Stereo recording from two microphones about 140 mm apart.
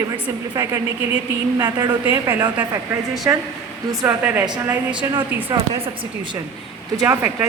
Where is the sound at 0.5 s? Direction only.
25° right (ahead or behind).